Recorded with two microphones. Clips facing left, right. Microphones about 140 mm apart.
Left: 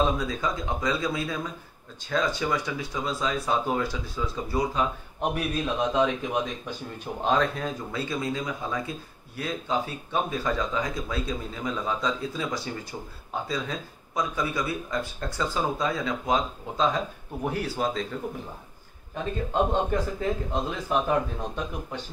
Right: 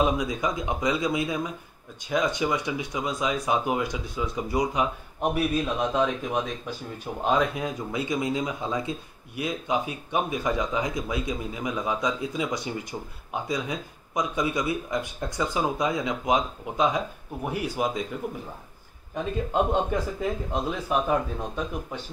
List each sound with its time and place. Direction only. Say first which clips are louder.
0.0 s speech: right 1 dB; 15° right (ahead or behind)
5.2 s a man's voice: right 3 dB; 5° right (ahead or behind)